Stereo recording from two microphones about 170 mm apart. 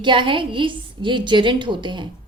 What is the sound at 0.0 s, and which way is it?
Speech, 30° right (ahead or behind).